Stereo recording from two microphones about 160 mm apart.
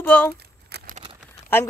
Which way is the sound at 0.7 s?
90° right.